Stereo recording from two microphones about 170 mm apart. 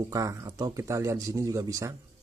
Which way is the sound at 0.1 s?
20° right (ahead or behind).